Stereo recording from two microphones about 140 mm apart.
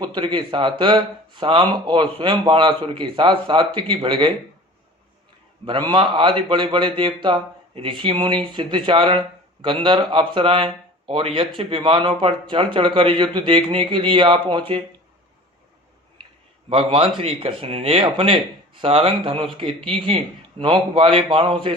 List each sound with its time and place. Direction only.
0.0 s speech: 35° right (ahead or behind)
5.9 s speech: 35° right (ahead or behind)
16.6 s speech: 40° right (ahead or behind)